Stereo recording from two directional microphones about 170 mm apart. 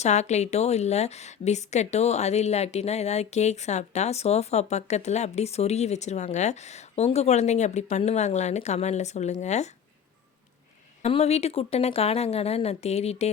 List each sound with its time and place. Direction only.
0.0 s a woman's voice: 40° left (ahead or behind)
11.0 s a woman's voice: 40° left (ahead or behind)